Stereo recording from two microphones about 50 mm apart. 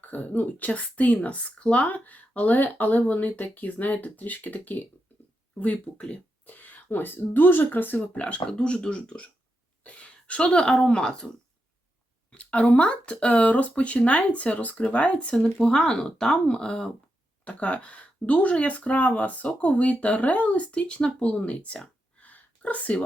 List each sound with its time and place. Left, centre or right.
0.0 s speech: left
8.2 s speech: left
12.3 s speech: left
17.4 s speech: left
22.2 s a sound: left